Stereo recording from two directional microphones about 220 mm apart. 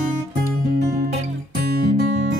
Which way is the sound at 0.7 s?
40° right (ahead or behind).